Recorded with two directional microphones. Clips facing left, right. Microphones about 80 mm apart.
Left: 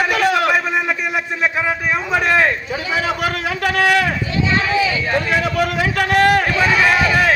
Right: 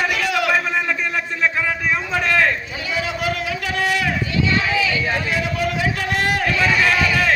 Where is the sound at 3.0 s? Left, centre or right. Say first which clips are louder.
Left 3 dB; left.